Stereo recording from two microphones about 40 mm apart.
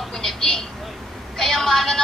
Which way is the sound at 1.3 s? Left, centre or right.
Centre.